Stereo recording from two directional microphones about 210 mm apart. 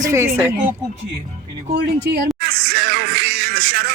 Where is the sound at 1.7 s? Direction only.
55° right (ahead or behind).